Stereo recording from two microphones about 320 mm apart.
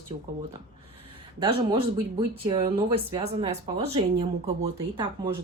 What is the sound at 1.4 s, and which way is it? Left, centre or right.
Speech, centre.